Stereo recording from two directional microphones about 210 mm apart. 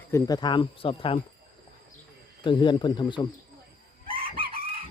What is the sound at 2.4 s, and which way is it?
Speech, 20° left (ahead or behind).